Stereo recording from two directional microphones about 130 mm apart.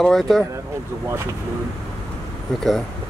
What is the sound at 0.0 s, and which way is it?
Speech, centre (ahead or behind).